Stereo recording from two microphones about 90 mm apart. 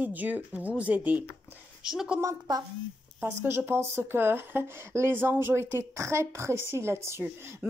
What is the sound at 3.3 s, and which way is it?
Speech, 25° right (ahead or behind).